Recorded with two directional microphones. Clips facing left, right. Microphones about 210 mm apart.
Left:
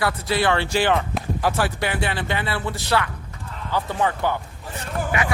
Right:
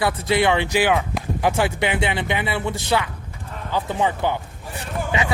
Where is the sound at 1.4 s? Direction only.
20° right (ahead or behind).